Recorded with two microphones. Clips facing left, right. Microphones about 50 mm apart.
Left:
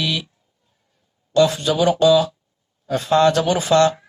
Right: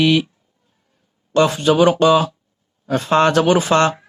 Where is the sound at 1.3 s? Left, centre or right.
Right.